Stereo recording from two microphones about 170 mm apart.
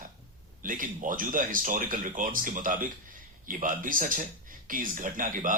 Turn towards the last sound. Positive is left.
turn(degrees=-50)  # may be behind; listen again after turning